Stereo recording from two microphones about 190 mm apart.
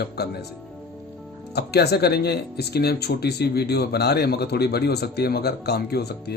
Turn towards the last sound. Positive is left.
turn(degrees=55)  # may be behind; listen again after turning